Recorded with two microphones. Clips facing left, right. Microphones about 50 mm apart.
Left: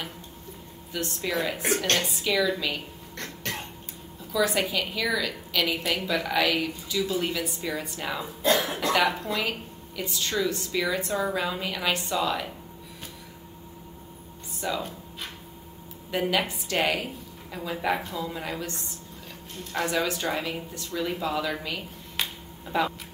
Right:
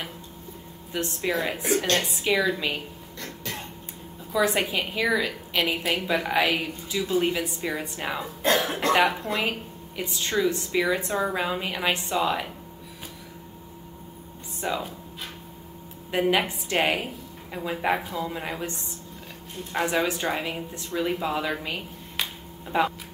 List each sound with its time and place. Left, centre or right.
0.9 s speech: right
1.6 s a woman's voice: left
2.0 s speech: right
3.4 s a sound: left
4.3 s speech: right
8.4 s cough: right
9.3 s speech: right
14.6 s speech: right
16.1 s a woman's voice: right
19.7 s speech: right